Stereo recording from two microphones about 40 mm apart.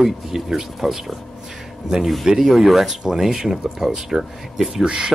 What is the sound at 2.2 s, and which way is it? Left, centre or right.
Speech, centre.